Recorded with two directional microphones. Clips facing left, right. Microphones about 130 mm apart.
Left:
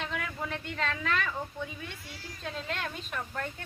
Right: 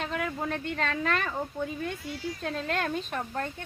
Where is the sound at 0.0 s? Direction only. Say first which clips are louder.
Right 5 dB; 45° right (ahead or behind).